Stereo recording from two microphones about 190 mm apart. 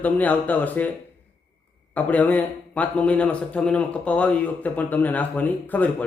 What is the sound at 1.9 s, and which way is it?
A man's voice, 10° left (ahead or behind).